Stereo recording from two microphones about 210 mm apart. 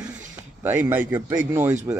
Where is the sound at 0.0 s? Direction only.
10° right (ahead or behind).